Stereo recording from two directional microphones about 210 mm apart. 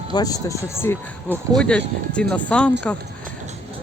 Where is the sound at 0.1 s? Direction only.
15° left (ahead or behind).